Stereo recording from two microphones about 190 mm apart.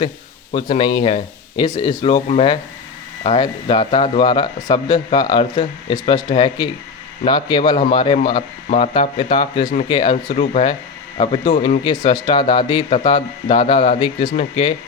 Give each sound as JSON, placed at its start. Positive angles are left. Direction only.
{"t": 0.5, "sound": "speech", "side_deg": 25}
{"t": 10.2, "sound": "speech", "side_deg": 35}